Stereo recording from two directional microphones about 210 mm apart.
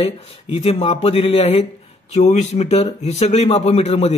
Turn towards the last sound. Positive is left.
turn(degrees=30)  # may be behind; listen again after turning